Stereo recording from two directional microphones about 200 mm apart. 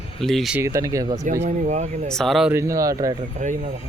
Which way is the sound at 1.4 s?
35° right (ahead or behind).